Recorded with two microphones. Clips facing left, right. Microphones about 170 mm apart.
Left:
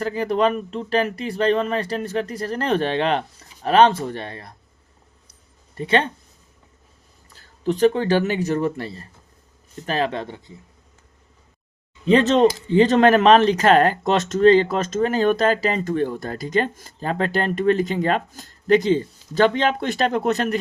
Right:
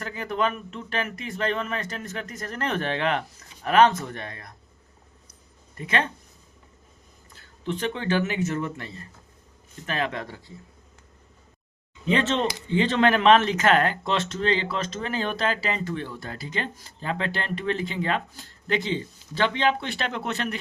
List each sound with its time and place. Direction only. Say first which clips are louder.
0.0 s speech: left 7 dB; 35° left (ahead or behind)
5.3 s a sound: even; 30° left (ahead or behind)
7.3 s speech: left 9 dB; 35° left (ahead or behind)
12.0 s speech: left 9 dB; 35° left (ahead or behind)